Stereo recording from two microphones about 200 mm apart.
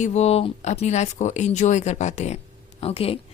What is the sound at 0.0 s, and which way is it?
Speech, 35° left (ahead or behind).